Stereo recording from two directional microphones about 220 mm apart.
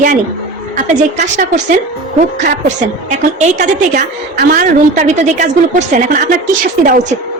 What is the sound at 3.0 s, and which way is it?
A woman's voice, 35° right (ahead or behind).